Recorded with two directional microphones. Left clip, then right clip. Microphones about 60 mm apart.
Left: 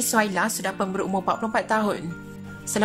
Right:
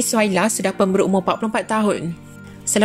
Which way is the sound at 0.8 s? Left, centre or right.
Right.